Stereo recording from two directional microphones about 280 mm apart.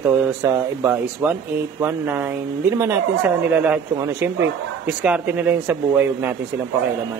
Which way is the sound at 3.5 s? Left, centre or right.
Centre.